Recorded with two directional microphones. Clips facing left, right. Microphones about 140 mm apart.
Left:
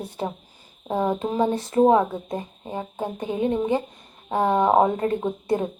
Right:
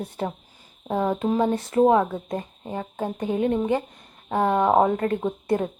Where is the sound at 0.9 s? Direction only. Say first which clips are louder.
Even; 15° left (ahead or behind).